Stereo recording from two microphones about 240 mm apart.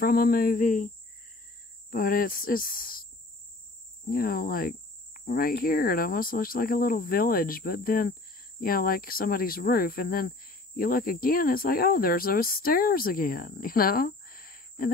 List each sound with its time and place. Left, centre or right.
0.0 s cricket: left
1.9 s cricket: left
4.1 s cricket: left